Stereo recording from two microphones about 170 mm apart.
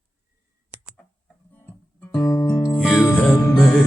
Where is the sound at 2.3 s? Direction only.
20° left (ahead or behind).